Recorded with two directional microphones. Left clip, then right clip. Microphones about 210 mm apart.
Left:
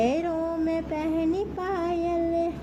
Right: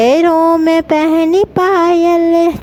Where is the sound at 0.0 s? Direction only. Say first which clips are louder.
Right 16 dB; 50° right (ahead or behind).